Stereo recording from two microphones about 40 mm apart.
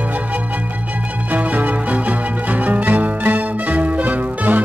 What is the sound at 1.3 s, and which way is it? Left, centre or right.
Music, right.